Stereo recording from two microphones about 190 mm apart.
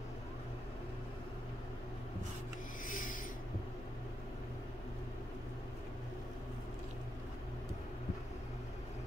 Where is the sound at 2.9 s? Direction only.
45° left (ahead or behind).